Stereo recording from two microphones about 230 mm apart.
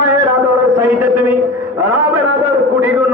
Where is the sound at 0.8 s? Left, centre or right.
Centre.